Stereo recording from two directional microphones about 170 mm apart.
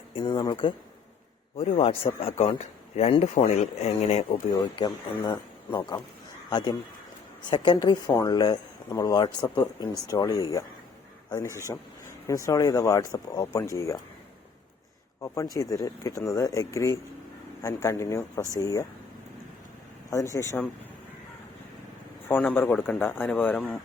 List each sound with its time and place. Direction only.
0.1 s speech: 30° left (ahead or behind)
1.5 s speech: 35° left (ahead or behind)
4.6 s speech: 20° left (ahead or behind)
15.2 s speech: 20° left (ahead or behind)
20.1 s speech: 20° left (ahead or behind)
22.3 s speech: 10° left (ahead or behind)